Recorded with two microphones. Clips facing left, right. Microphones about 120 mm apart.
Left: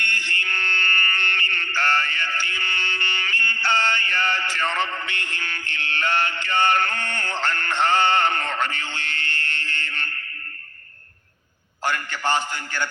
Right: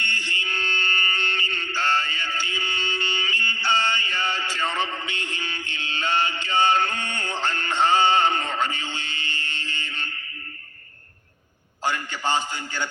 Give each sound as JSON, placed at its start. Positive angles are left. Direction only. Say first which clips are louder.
{"t": 0.0, "sound": "a sound", "louder": "left 2 dB", "side_deg": -15}
{"t": 0.7, "sound": "mantra", "louder": "left 2 dB", "side_deg": -15}
{"t": 2.5, "sound": "music", "louder": "even", "side_deg": -15}
{"t": 5.2, "sound": "mantra", "louder": "even", "side_deg": -15}
{"t": 7.4, "sound": "music", "louder": "even", "side_deg": -15}
{"t": 8.5, "sound": "a sound", "louder": "even", "side_deg": -15}
{"t": 11.9, "sound": "a man's voice", "louder": "left 1 dB", "side_deg": -15}